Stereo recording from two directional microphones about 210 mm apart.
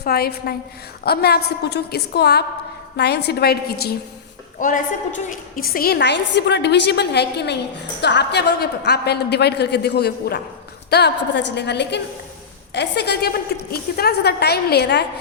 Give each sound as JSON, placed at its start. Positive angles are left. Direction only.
{"t": 0.0, "sound": "a woman's voice", "side_deg": 50}
{"t": 4.6, "sound": "a woman's voice", "side_deg": 40}